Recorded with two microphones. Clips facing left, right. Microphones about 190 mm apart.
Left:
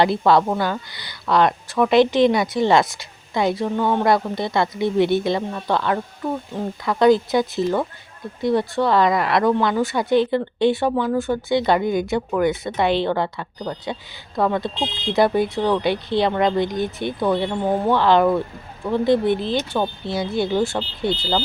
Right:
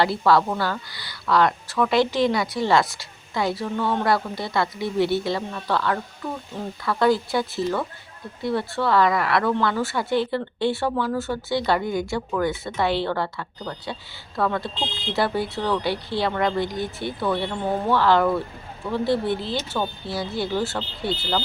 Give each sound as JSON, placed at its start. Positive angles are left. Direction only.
{"t": 0.0, "sound": "speech", "side_deg": 20}